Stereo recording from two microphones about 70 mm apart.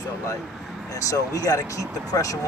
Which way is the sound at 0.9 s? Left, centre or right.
Left.